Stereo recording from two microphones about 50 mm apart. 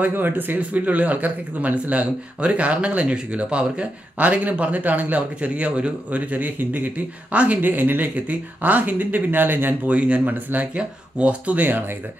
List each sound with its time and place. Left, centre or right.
0.0 s speech: right
0.6 s speech: right
9.8 s speech: right